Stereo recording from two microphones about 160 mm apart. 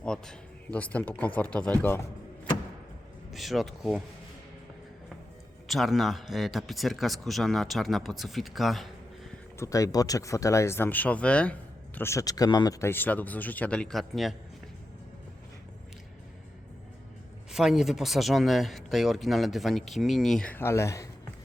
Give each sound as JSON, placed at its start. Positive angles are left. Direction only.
{"t": 0.0, "sound": "speech", "side_deg": 5}
{"t": 3.3, "sound": "speech", "side_deg": 0}
{"t": 5.6, "sound": "speech", "side_deg": 0}
{"t": 9.6, "sound": "speech", "side_deg": 20}
{"t": 12.8, "sound": "speech", "side_deg": 15}
{"t": 17.5, "sound": "speech", "side_deg": 0}